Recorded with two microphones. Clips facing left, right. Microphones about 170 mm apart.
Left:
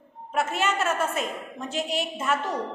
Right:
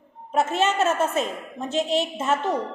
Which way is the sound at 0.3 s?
25° right (ahead or behind).